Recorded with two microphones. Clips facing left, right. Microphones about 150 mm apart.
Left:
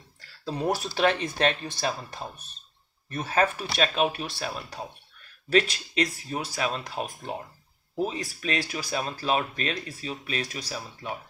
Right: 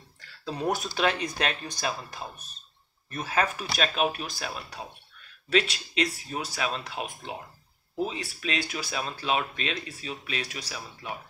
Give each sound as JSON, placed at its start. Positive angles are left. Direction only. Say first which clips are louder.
{"t": 0.5, "sound": "speech", "louder": "left 1 dB", "side_deg": 35}
{"t": 3.1, "sound": "speech", "louder": "left 3 dB", "side_deg": 35}